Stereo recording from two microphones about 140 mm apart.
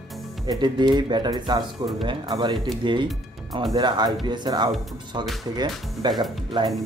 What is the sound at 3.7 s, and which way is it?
Speech, 30° right (ahead or behind).